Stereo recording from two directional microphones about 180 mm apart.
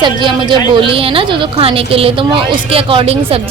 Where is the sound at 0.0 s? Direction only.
25° right (ahead or behind).